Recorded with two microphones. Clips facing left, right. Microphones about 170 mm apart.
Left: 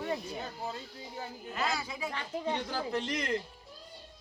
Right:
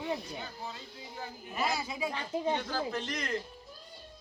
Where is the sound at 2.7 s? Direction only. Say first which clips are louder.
Left 1 dB; 15° left (ahead or behind).